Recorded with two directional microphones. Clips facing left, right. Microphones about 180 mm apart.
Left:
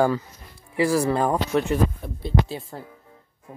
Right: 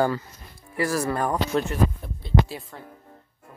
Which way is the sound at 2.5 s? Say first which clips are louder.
Left 4 dB; 25° left (ahead or behind).